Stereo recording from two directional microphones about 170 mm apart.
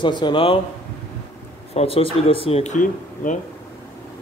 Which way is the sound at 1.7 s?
35° left (ahead or behind).